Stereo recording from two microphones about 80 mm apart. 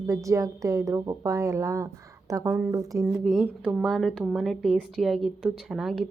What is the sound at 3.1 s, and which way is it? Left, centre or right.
Speech, centre.